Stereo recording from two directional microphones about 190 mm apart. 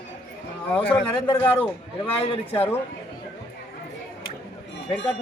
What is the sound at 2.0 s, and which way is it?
Speech, 30° left (ahead or behind).